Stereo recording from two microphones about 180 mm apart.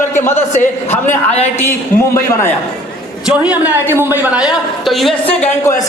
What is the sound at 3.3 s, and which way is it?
A woman's voice, 5° right (ahead or behind).